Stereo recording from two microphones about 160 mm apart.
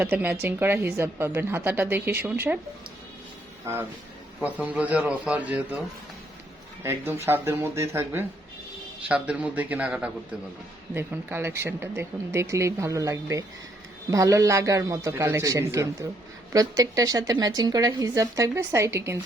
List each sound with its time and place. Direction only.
0.0 s speech: 10° right (ahead or behind)
4.4 s speech: 10° right (ahead or behind)
6.8 s a woman's voice: 15° right (ahead or behind)